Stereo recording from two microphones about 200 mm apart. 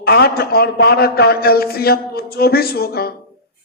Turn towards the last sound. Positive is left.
turn(degrees=50)  # may be behind; listen again after turning